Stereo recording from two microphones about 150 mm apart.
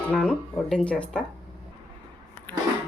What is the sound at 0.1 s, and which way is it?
Speech, 5° left (ahead or behind).